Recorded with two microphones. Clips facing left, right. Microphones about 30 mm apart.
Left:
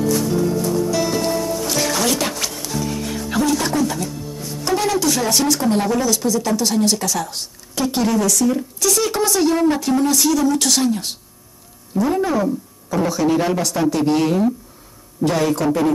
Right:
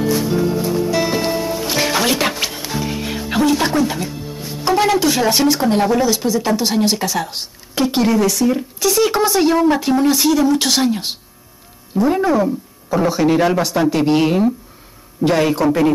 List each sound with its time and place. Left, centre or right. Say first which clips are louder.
0.0 s music: right 1 dB; right
12.0 s speech: right 3 dB; right